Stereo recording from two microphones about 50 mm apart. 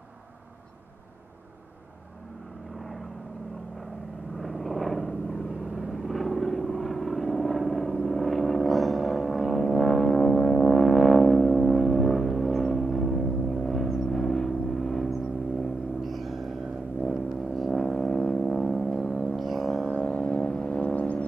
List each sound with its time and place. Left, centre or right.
2.8 s vehicle: centre
4.4 s vehicle: centre
17.6 s music: centre
19.9 s a sound: left